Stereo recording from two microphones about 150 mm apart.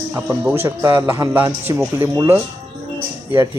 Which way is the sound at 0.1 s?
15° right (ahead or behind).